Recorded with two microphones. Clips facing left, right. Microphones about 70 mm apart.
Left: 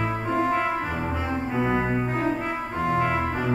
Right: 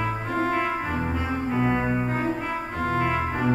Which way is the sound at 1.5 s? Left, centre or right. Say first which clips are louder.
Right 1 dB; centre.